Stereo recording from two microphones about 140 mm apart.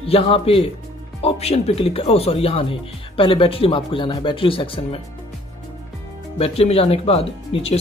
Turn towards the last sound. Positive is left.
turn(degrees=45)  # may be behind; listen again after turning